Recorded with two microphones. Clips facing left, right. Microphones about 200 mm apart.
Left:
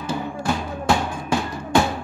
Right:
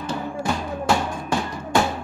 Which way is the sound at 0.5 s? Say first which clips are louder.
Left 1 dB; centre (ahead or behind).